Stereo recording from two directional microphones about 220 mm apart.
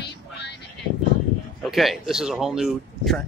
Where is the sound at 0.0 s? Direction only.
50° left (ahead or behind).